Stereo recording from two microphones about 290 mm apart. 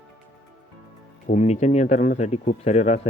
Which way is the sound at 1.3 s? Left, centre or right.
Left.